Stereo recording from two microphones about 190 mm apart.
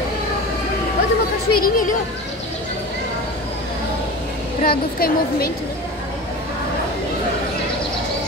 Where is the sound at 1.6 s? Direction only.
45° left (ahead or behind).